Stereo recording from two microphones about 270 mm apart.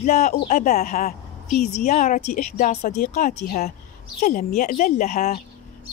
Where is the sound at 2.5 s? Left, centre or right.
Left.